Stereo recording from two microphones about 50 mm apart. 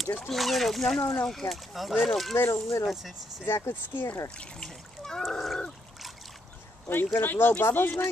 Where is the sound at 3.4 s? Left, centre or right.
Left.